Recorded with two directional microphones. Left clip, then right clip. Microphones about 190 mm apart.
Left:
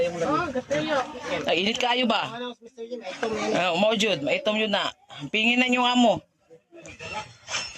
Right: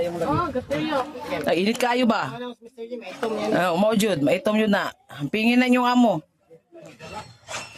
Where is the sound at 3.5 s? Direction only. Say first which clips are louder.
Right 2 dB; 45° right (ahead or behind).